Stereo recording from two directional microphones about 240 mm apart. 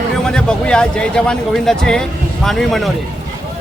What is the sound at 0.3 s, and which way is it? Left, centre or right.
Speech, centre.